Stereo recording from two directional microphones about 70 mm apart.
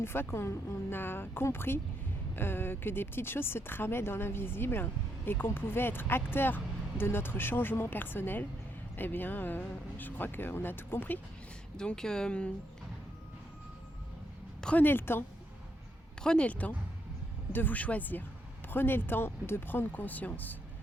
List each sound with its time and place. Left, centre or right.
0.0 s speech: left
11.8 s speech: centre
14.8 s speech: left
16.2 s speech: centre